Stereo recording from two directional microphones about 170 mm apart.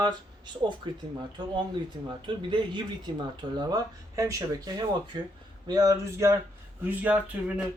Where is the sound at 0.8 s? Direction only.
25° right (ahead or behind).